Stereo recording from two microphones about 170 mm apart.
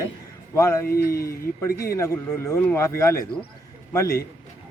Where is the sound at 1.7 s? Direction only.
65° left (ahead or behind).